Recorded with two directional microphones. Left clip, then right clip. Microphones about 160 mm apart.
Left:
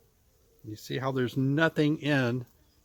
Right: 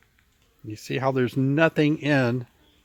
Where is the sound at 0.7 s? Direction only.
55° right (ahead or behind).